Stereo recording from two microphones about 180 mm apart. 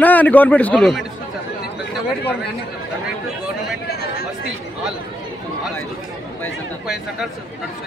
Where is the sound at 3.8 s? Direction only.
60° left (ahead or behind).